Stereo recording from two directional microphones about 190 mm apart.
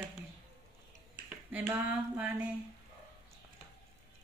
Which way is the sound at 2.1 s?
5° right (ahead or behind).